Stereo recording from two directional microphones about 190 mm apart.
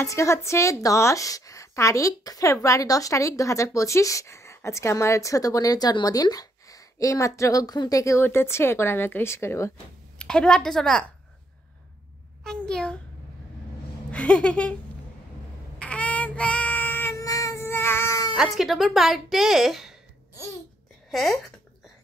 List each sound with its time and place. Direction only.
0.0 s a woman's voice: 15° left (ahead or behind)
12.4 s a sound: 5° left (ahead or behind)
14.1 s a sound: 5° left (ahead or behind)
15.8 s child singing: 5° left (ahead or behind)
18.3 s speech: centre (ahead or behind)
21.1 s speech: centre (ahead or behind)